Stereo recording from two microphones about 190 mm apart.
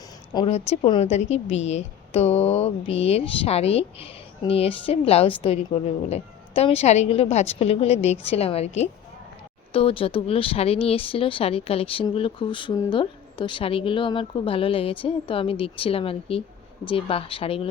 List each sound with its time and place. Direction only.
0.3 s speech: 30° left (ahead or behind)